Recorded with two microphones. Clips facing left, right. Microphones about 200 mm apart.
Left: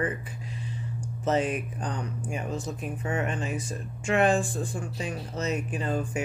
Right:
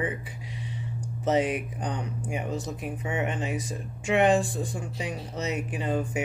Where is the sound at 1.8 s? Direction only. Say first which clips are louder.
Right 1 dB; 20° right (ahead or behind).